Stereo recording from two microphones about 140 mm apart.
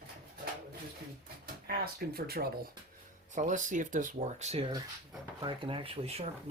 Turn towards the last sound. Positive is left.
turn(degrees=-45)  # may be behind; listen again after turning